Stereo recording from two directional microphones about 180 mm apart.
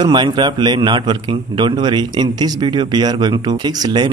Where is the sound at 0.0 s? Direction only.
25° right (ahead or behind).